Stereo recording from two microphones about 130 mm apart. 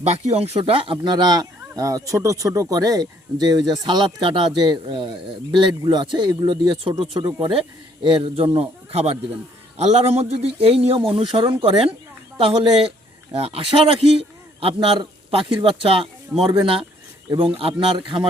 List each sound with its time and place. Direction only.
0.0 s a man's voice: 55° right (ahead or behind); by 18.3 s 40° right (ahead or behind)